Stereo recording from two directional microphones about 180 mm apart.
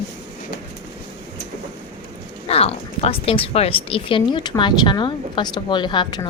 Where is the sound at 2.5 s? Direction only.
35° left (ahead or behind).